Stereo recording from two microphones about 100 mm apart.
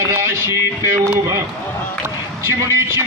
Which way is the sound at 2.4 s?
25° right (ahead or behind).